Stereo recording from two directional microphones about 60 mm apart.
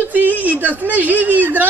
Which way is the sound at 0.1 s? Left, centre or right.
Right.